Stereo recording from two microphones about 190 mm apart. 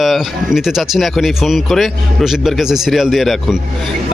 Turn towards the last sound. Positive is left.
turn(degrees=0)  # may be behind; listen again after turning